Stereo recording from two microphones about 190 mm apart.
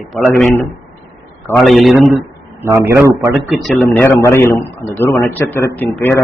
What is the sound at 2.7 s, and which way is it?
Speech, 15° right (ahead or behind).